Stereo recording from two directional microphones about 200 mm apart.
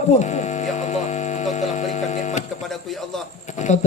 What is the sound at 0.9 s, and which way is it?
Hum, 35° left (ahead or behind).